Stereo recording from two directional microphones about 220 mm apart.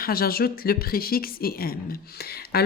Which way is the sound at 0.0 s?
40° left (ahead or behind).